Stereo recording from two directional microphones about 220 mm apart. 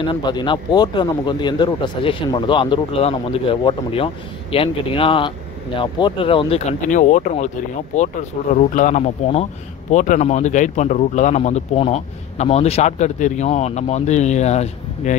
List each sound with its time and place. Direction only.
0.0 s speech: 20° left (ahead or behind)